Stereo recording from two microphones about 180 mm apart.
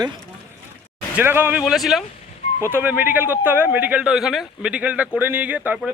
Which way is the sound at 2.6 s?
10° right (ahead or behind).